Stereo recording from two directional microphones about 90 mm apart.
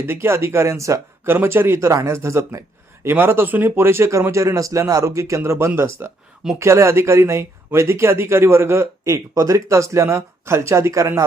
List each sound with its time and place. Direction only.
0.0 s speech: 30° right (ahead or behind)